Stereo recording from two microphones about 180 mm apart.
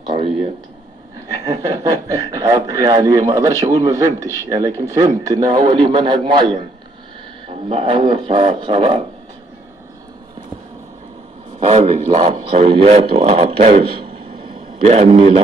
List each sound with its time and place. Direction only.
0.0 s a sound: 30° right (ahead or behind)
1.4 s a man's voice: 20° right (ahead or behind)
7.4 s a man's voice: 30° right (ahead or behind)
11.6 s speech: 35° right (ahead or behind)
14.9 s speech: 35° right (ahead or behind)